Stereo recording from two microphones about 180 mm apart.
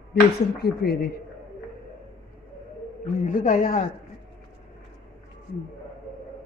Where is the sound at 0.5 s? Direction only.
65° left (ahead or behind).